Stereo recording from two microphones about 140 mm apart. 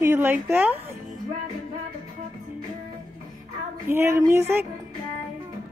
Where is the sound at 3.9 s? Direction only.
15° right (ahead or behind).